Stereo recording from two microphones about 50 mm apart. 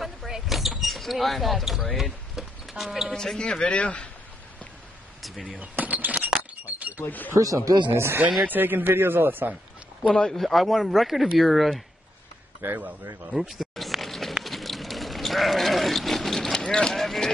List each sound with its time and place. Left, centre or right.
0.3 s vehicle: centre
3.1 s a man's voice: centre
3.3 s a man's voice: centre
5.6 s speech: right
6.6 s chink: right
7.1 s speech: left
7.9 s speech: right
8.5 s speech: right
10.1 s speech: centre
12.6 s speech: right
13.3 s a sound: centre
14.4 s sheep: centre
16.5 s a sound: centre
17.0 s a sound: centre